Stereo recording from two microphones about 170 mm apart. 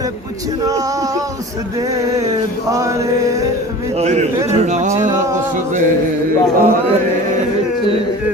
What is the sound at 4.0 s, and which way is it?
A man's voice, 40° right (ahead or behind).